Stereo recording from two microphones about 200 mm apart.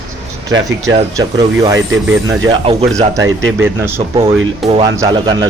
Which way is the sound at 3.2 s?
70° right (ahead or behind).